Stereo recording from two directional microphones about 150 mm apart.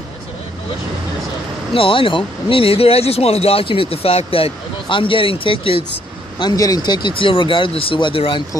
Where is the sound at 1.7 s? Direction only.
35° left (ahead or behind).